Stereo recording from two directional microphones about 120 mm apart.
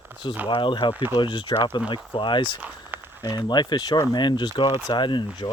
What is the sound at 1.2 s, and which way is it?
Speech, 45° left (ahead or behind).